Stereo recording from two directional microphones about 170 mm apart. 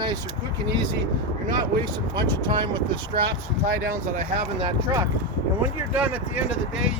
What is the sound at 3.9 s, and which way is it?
Speech, 50° right (ahead or behind).